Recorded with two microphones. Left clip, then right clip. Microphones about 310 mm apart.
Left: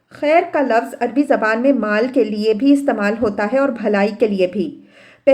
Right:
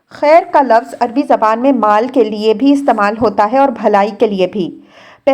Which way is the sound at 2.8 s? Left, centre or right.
Centre.